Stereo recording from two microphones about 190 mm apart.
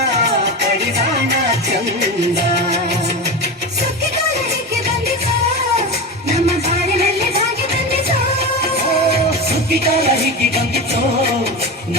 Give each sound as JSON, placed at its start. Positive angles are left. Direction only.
{"t": 6.3, "sound": "music", "side_deg": -35}
{"t": 9.8, "sound": "music", "side_deg": -30}